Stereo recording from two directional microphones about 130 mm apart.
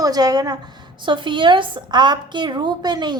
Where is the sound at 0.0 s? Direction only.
30° right (ahead or behind).